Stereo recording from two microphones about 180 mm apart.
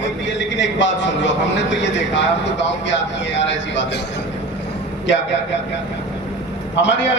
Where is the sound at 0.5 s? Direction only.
90° left.